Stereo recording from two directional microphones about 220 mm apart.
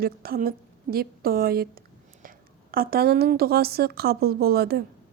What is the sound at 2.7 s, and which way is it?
Speech, 45° right (ahead or behind).